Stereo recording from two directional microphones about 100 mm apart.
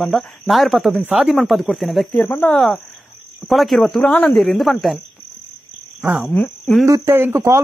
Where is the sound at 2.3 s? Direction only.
15° left (ahead or behind).